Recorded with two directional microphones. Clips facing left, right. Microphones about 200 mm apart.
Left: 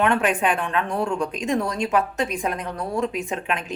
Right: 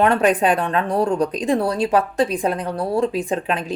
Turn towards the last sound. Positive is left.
turn(degrees=-35)  # may be behind; listen again after turning